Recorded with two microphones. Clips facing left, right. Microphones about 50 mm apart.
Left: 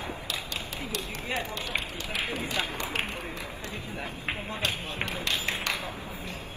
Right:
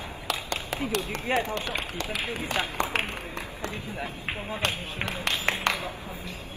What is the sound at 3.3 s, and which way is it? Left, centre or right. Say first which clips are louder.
Run: right 2 dB; right.